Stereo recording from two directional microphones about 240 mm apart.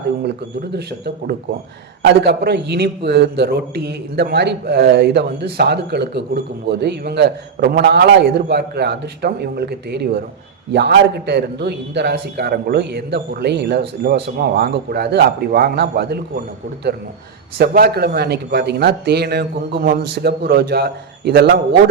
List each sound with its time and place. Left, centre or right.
0.7 s a man's voice: right
17.6 s a man's voice: right